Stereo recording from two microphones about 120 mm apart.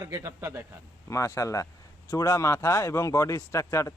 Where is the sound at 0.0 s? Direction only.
25° right (ahead or behind).